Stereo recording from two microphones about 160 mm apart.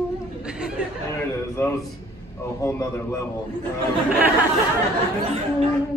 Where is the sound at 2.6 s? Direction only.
20° left (ahead or behind).